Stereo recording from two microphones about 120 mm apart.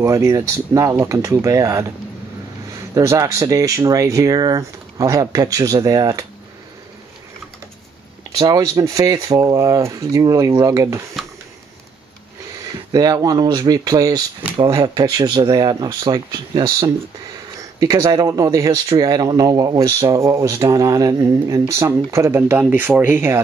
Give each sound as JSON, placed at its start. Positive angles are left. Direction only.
{"t": 0.0, "sound": "speech", "side_deg": -25}
{"t": 8.4, "sound": "speech", "side_deg": -30}
{"t": 12.9, "sound": "speech", "side_deg": -30}
{"t": 17.6, "sound": "speech", "side_deg": -25}